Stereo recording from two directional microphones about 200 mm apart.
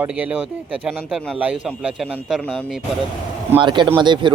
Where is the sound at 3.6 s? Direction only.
25° right (ahead or behind).